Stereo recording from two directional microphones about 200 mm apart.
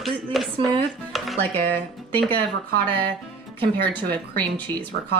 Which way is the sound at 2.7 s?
50° right (ahead or behind).